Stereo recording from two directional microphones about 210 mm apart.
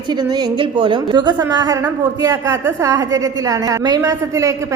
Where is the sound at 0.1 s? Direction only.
20° right (ahead or behind).